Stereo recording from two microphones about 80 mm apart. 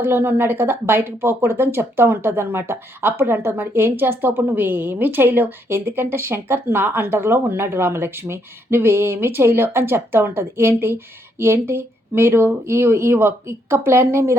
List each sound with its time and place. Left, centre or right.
0.0 s speech: right